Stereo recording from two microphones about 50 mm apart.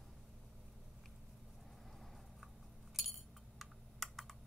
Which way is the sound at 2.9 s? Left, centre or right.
Centre.